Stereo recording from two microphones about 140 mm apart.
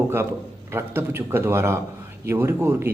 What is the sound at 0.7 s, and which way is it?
A man's voice, 15° right (ahead or behind).